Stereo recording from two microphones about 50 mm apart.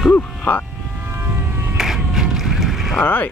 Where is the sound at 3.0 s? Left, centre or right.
Left.